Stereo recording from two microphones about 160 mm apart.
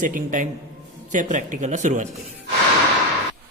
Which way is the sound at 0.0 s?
55° right (ahead or behind).